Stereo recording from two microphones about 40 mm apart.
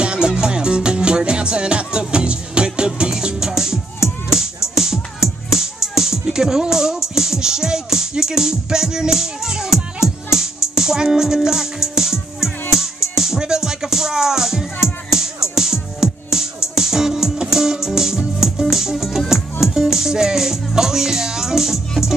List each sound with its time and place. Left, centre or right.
0.0 s music: right